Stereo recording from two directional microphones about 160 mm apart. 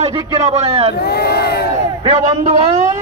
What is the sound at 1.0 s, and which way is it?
Speech, 85° left.